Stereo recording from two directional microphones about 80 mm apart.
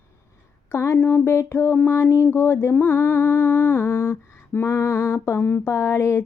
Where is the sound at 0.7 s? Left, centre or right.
Left.